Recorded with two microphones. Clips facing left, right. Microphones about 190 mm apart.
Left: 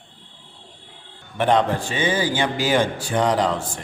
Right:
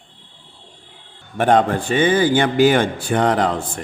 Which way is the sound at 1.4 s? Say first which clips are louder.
Right 3 dB; 50° right (ahead or behind).